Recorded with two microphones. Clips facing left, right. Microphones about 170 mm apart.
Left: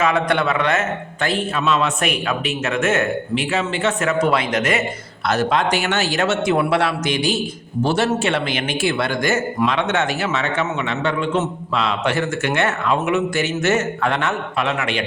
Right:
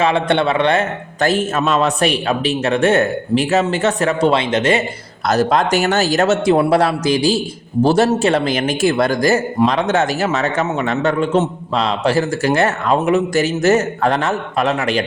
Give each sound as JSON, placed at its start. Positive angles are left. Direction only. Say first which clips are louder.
{"t": 0.0, "sound": "a man's voice", "louder": "right 3 dB", "side_deg": -30}
{"t": 5.2, "sound": "a man's voice", "louder": "right 3 dB", "side_deg": -40}